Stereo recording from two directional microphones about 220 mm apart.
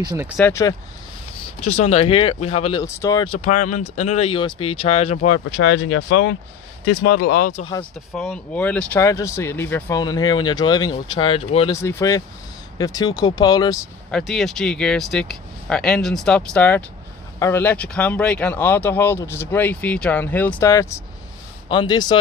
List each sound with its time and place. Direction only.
0.0 s speech: 15° right (ahead or behind)
0.4 s speech: 15° left (ahead or behind)
1.6 s speech: 30° left (ahead or behind)
2.8 s speech: 15° left (ahead or behind)
3.3 s speech: 30° left (ahead or behind)
5.6 s speech: 65° left (ahead or behind)
7.2 s speech: 40° left (ahead or behind)
8.1 s speech: centre (ahead or behind); by 11.7 s 25° left (ahead or behind)
11.7 s speech: 10° left (ahead or behind)
14.1 s speech: centre (ahead or behind); by 22.2 s 20° left (ahead or behind)